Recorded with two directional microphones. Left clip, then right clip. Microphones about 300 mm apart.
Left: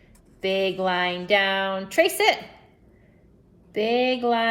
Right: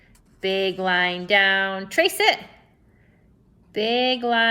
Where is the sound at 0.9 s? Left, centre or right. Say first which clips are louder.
Right 5 dB; right.